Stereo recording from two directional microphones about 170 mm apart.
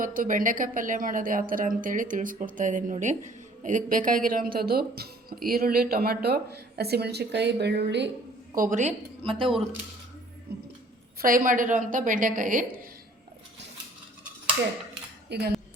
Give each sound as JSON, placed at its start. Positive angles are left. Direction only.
{"t": 0.0, "sound": "a woman's voice", "side_deg": -50}
{"t": 8.5, "sound": "a woman's voice", "side_deg": -50}
{"t": 10.5, "sound": "a sound", "side_deg": -65}
{"t": 11.2, "sound": "a woman's voice", "side_deg": -55}
{"t": 15.3, "sound": "speech", "side_deg": -70}